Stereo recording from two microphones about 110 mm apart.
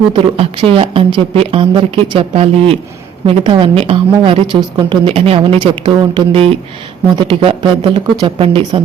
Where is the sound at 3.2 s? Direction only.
50° right (ahead or behind).